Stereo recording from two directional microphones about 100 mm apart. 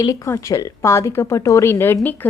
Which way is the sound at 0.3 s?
30° left (ahead or behind).